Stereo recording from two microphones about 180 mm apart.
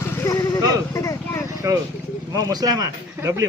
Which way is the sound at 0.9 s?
15° left (ahead or behind).